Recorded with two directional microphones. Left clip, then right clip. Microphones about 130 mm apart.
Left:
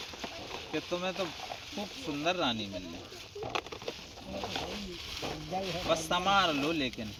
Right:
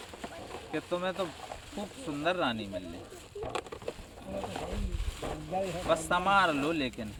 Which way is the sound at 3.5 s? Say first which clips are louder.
Left 1 dB; 30° left (ahead or behind).